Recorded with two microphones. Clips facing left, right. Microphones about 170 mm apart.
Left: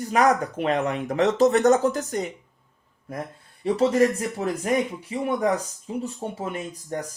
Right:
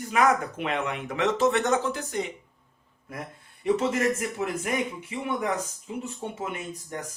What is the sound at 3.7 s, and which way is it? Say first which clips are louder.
Speech: left 8 dB; 30° left (ahead or behind).